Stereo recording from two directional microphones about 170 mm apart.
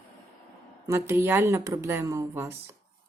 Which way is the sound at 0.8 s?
15° right (ahead or behind).